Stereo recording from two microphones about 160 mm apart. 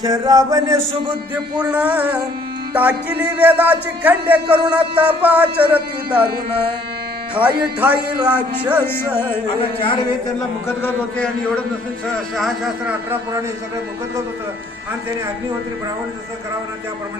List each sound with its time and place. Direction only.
0.0 s a sound: 25° right (ahead or behind)
1.5 s speech: 10° right (ahead or behind)
7.3 s speech: 10° right (ahead or behind)
8.8 s a man's voice: 15° left (ahead or behind)
9.6 s a man's voice: 35° left (ahead or behind)
10.8 s a man's voice: 5° left (ahead or behind)
12.8 s speech: 15° right (ahead or behind)